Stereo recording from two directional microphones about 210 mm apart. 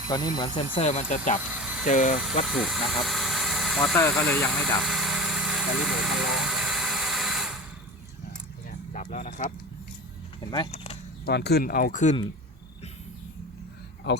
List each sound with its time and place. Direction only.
0.1 s speech: 20° left (ahead or behind); by 1.4 s 35° left (ahead or behind)
1.4 s a sound: 5° right (ahead or behind)
1.9 s speech: 35° left (ahead or behind)
2.5 s speech: centre (ahead or behind)
4.8 s vehicle: centre (ahead or behind)
8.9 s a sound: 40° left (ahead or behind)
10.5 s speech: 25° left (ahead or behind)
11.3 s speech: 50° left (ahead or behind)